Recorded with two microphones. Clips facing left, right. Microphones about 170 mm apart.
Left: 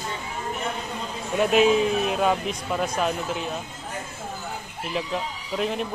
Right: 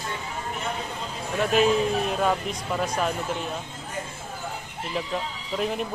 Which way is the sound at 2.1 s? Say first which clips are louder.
Left 2 dB; 5° left (ahead or behind).